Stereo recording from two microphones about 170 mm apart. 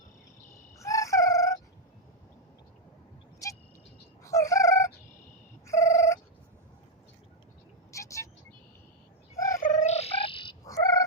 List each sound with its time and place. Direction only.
0.8 s crowing: 20° left (ahead or behind)
3.4 s vehicle: 20° left (ahead or behind)
4.2 s a sound: 20° left (ahead or behind)
5.6 s telephone bell ringing: 15° left (ahead or behind)
7.9 s vehicle: 20° left (ahead or behind)
9.3 s bird: 20° left (ahead or behind)
9.6 s a sound: 45° left (ahead or behind); by 11.0 s 20° left (ahead or behind)